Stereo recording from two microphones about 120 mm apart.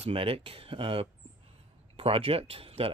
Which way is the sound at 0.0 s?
50° right (ahead or behind).